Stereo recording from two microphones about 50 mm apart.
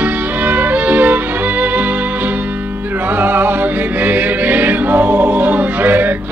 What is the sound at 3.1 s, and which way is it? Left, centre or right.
Music, right.